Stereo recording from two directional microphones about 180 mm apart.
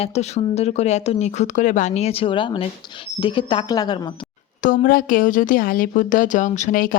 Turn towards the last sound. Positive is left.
turn(degrees=45)  # may be behind; listen again after turning